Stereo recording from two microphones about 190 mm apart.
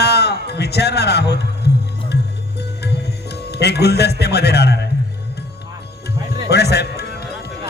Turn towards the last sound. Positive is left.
turn(degrees=60)  # may be behind; listen again after turning